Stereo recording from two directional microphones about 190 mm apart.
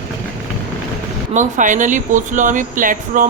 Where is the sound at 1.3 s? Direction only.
40° right (ahead or behind).